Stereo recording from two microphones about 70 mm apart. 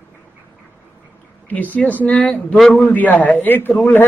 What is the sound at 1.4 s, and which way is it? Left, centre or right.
Speech, left.